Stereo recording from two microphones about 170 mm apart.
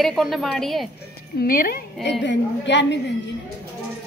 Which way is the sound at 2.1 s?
90° left.